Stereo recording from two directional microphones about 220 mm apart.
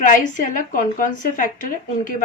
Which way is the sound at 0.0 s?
35° left (ahead or behind).